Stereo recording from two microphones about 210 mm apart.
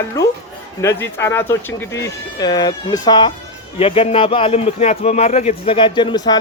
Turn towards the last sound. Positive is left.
turn(degrees=20)  # may be behind; listen again after turning